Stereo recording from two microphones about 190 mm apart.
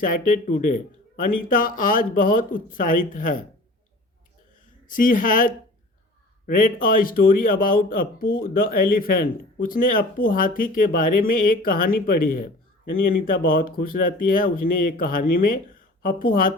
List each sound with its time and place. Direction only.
0.0 s speech: 45° left (ahead or behind)
4.9 s speech: 45° left (ahead or behind)